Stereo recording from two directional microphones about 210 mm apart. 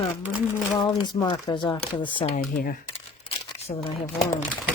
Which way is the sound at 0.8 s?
20° left (ahead or behind).